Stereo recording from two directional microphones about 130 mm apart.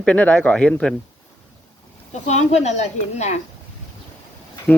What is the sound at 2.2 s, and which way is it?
Speech, 60° left (ahead or behind).